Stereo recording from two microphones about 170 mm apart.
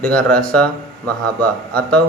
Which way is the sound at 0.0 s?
5° left (ahead or behind).